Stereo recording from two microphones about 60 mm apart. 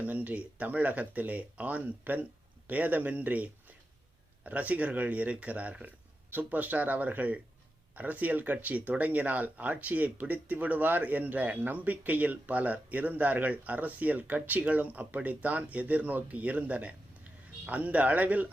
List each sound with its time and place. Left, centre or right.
0.0 s a man's voice: right